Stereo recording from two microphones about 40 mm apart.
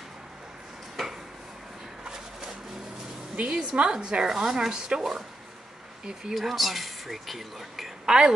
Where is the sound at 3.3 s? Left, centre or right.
Right.